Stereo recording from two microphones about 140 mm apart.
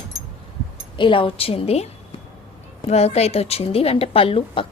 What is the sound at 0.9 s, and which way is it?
Speech, 35° left (ahead or behind).